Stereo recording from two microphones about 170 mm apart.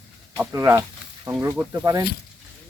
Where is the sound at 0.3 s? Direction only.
15° right (ahead or behind).